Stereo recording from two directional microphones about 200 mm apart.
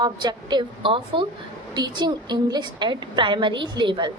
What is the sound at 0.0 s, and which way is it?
A woman's voice, 20° right (ahead or behind).